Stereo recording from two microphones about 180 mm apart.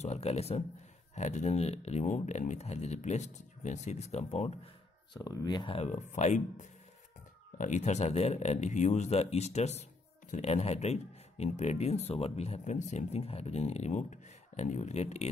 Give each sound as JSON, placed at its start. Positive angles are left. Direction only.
{"t": 0.0, "sound": "a man's voice", "side_deg": 35}
{"t": 5.2, "sound": "speech", "side_deg": 20}
{"t": 5.8, "sound": "a man's voice", "side_deg": 40}